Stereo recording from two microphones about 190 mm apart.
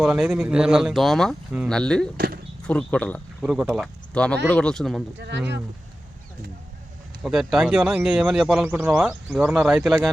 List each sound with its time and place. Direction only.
0.0 s speech: 5° right (ahead or behind)
2.1 s speech: 50° right (ahead or behind)
2.6 s speech: 5° left (ahead or behind)
7.2 s speech: centre (ahead or behind)